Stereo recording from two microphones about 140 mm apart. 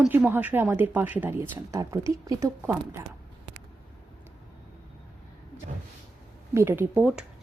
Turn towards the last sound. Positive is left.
turn(degrees=-10)  # may be behind; listen again after turning